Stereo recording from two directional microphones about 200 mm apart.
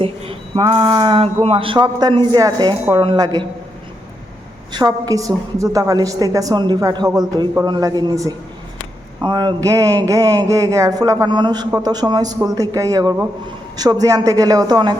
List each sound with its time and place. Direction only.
0.0 s speech: 30° right (ahead or behind)
4.7 s a woman's voice: 20° right (ahead or behind)